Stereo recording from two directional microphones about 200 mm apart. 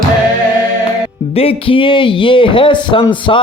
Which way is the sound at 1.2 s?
30° left (ahead or behind).